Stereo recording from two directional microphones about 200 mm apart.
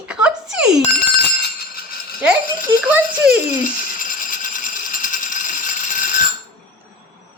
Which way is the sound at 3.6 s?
40° left (ahead or behind).